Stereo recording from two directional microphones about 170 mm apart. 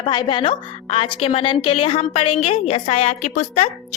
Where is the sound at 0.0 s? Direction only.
30° left (ahead or behind).